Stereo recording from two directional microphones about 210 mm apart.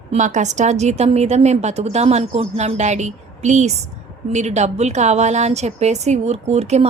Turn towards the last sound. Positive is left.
turn(degrees=-30)  # may be behind; listen again after turning